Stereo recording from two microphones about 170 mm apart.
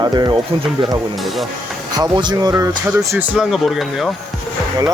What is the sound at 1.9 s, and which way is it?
Speech, 25° right (ahead or behind).